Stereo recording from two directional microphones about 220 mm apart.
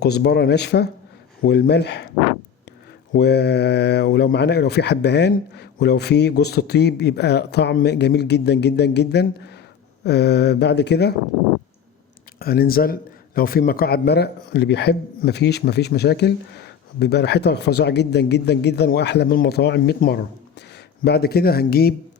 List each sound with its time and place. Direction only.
0.0 s a man's voice: 50° left (ahead or behind)
3.1 s a man's voice: 50° left (ahead or behind)
12.4 s a man's voice: 45° left (ahead or behind)